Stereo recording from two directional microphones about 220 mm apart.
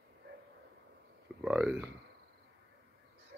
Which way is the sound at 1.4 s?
5° right (ahead or behind).